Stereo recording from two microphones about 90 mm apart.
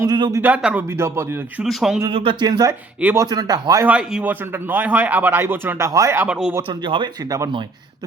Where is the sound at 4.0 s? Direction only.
10° right (ahead or behind).